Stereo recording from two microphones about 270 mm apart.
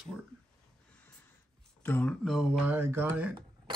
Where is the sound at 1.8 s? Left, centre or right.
Centre.